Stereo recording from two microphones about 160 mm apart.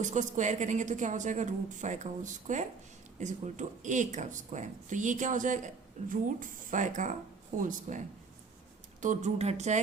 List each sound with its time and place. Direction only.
0.0 s speech: 50° right (ahead or behind)